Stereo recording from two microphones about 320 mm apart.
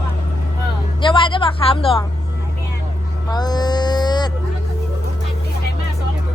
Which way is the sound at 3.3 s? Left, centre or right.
Centre.